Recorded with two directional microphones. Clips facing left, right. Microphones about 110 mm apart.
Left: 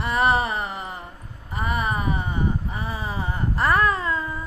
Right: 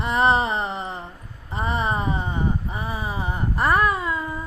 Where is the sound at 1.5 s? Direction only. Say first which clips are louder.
Right 1 dB; 25° right (ahead or behind).